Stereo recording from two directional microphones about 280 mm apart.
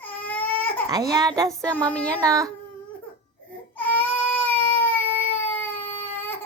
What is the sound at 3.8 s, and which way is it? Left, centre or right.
Baby cry, centre.